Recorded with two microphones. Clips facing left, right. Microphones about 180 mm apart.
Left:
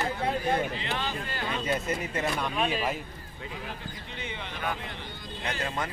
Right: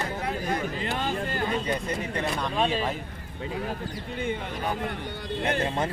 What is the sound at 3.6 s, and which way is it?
Speech, 45° right (ahead or behind).